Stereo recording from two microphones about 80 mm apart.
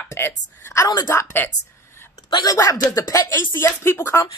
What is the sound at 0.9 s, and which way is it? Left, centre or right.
Speech, left.